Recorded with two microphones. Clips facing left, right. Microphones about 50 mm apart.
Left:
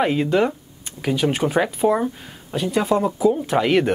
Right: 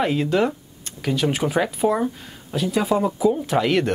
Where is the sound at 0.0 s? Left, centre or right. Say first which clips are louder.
Left 2 dB; centre.